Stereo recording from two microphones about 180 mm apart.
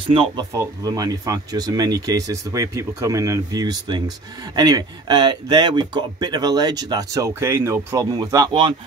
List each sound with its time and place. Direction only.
0.1 s speech: 30° right (ahead or behind)